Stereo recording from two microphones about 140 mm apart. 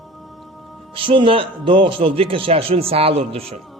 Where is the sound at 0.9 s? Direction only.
40° right (ahead or behind).